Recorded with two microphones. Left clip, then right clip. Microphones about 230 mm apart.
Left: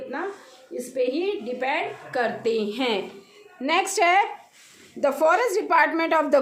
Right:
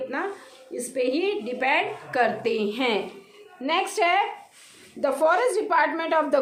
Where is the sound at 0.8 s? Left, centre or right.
Centre.